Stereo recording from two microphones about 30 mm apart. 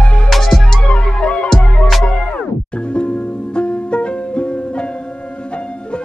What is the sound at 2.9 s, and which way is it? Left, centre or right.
Music, left.